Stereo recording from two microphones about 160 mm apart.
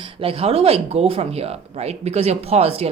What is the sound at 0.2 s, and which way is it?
A woman's voice, 35° right (ahead or behind).